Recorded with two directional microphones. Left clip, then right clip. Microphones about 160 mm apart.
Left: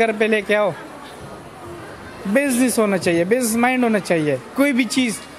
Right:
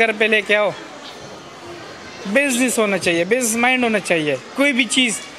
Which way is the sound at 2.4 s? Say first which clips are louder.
Right 1 dB; 15° left (ahead or behind).